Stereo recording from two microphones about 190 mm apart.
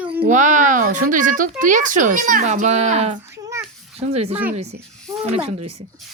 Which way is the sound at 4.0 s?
35° right (ahead or behind).